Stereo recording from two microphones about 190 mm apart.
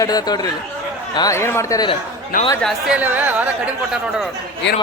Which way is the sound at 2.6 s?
5° right (ahead or behind).